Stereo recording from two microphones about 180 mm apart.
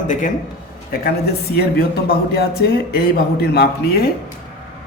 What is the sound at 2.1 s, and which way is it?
Speech, 60° left (ahead or behind).